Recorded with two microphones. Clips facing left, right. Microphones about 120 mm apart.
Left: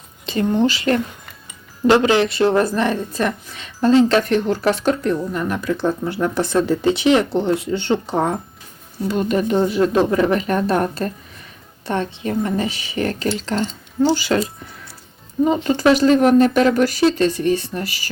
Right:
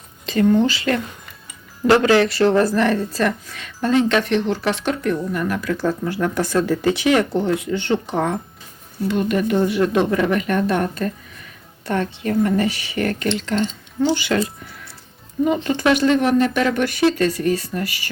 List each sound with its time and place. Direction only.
0.3 s speech: 25° left (ahead or behind)
1.9 s a woman's voice: 20° left (ahead or behind); by 5.1 s 40° left (ahead or behind)
5.3 s a woman's voice: 25° left (ahead or behind)
9.4 s speech: 25° left (ahead or behind)
11.9 s a woman's voice: 20° left (ahead or behind); by 14.3 s 35° left (ahead or behind)
15.5 s speech: 15° left (ahead or behind)
15.8 s a woman's voice: 35° left (ahead or behind)